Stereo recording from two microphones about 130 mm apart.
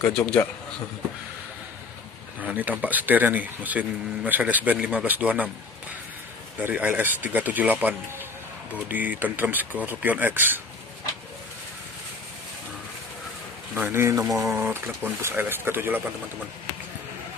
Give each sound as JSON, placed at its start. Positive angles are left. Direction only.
{"t": 0.0, "sound": "a man's voice", "side_deg": 10}
{"t": 2.4, "sound": "speech", "side_deg": -15}
{"t": 6.6, "sound": "speech", "side_deg": -15}
{"t": 13.7, "sound": "speech", "side_deg": -15}